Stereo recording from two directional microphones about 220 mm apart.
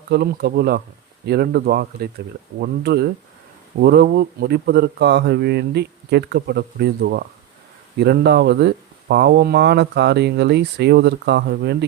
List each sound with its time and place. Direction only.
0.1 s speech: 45° right (ahead or behind)